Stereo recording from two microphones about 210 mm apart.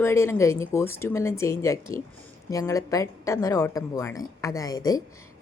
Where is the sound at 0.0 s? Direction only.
10° left (ahead or behind).